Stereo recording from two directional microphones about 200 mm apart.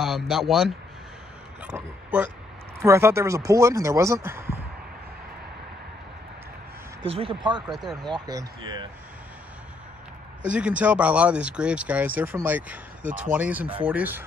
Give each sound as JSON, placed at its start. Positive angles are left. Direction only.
{"t": 0.0, "sound": "speech", "side_deg": 0}
{"t": 7.0, "sound": "speech", "side_deg": -30}
{"t": 7.7, "sound": "speech", "side_deg": 0}
{"t": 8.1, "sound": "speech", "side_deg": -20}
{"t": 10.4, "sound": "speech", "side_deg": -5}